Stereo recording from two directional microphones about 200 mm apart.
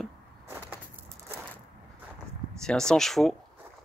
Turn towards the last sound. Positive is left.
turn(degrees=0)  # may be behind; listen again after turning